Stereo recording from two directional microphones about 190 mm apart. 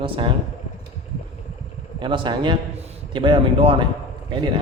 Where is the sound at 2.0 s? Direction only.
25° right (ahead or behind).